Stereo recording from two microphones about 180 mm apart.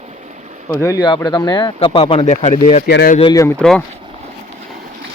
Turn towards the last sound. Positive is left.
turn(degrees=5)  # may be behind; listen again after turning